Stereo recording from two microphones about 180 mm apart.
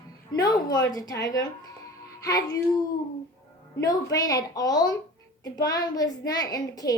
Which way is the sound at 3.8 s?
20° left (ahead or behind).